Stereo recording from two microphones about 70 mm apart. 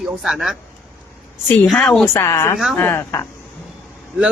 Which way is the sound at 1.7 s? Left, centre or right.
Centre.